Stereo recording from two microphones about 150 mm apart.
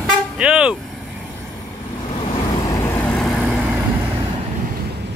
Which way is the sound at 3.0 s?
Centre (ahead or behind).